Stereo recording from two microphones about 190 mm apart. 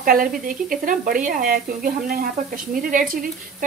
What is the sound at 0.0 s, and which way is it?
A woman's voice, 50° right (ahead or behind).